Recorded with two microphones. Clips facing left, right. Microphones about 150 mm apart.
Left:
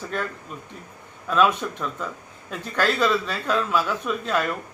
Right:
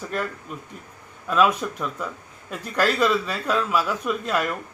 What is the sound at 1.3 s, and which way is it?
Speech, 5° right (ahead or behind).